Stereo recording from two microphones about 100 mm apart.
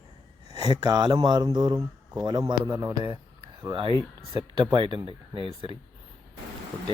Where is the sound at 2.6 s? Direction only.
25° right (ahead or behind).